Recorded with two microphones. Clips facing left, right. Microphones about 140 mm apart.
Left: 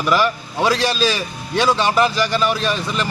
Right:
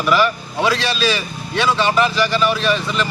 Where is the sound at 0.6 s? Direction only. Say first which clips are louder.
Left 1 dB; 40° left (ahead or behind).